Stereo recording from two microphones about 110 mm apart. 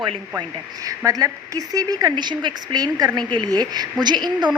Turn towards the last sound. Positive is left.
turn(degrees=-40)  # may be behind; listen again after turning